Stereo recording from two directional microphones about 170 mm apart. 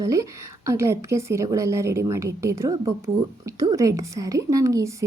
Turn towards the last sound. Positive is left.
turn(degrees=-20)  # may be behind; listen again after turning